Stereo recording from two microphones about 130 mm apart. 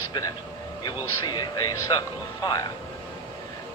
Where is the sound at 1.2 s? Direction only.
30° left (ahead or behind).